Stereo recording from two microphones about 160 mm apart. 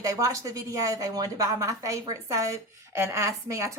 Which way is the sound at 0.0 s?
20° right (ahead or behind).